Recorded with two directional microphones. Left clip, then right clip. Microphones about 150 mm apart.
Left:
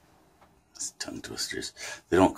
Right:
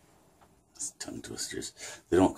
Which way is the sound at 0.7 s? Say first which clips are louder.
Left 3 dB; 5° left (ahead or behind).